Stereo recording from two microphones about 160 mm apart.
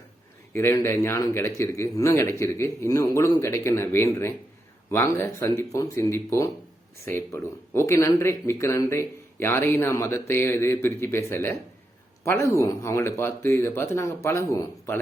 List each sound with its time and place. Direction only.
0.5 s speech: 15° left (ahead or behind)